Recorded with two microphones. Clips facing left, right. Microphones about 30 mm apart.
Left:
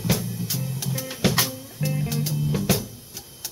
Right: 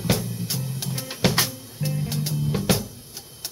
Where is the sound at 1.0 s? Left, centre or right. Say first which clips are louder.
Right 1 dB; right.